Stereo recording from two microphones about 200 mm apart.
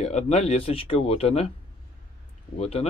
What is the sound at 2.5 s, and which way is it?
Speech, 30° left (ahead or behind).